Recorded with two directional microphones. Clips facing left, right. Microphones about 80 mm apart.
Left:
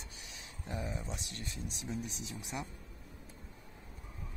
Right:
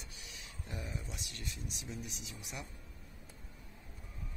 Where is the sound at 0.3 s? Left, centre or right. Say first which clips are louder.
Left 4 dB; left.